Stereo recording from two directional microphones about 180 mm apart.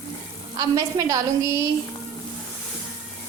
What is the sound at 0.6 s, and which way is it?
Speech, 20° right (ahead or behind).